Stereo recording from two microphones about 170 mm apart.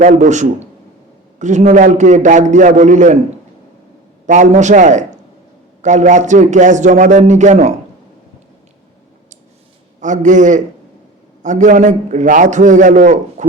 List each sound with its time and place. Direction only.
0.0 s a man's voice: 45° right (ahead or behind)
4.3 s a man's voice: 45° right (ahead or behind)
10.0 s a man's voice: 45° right (ahead or behind)